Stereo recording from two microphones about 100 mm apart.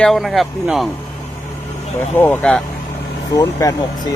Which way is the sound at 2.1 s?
20° left (ahead or behind).